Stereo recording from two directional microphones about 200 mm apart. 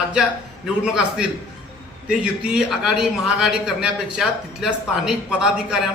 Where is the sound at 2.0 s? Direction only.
5° right (ahead or behind).